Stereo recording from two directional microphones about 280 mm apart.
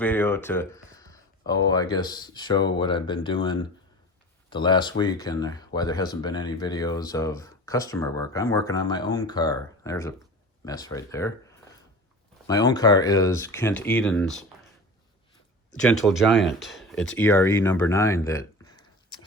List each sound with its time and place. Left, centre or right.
0.0 s speech: centre
15.8 s speech: centre
18.3 s a sound: centre